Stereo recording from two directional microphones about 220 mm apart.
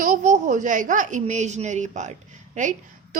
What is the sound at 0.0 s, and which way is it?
A woman's voice, 35° right (ahead or behind).